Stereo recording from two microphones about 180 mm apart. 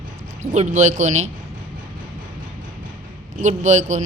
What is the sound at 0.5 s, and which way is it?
Speech, 40° right (ahead or behind).